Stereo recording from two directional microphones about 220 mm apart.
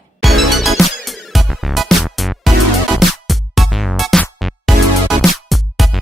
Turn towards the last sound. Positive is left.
turn(degrees=0)  # may be behind; listen again after turning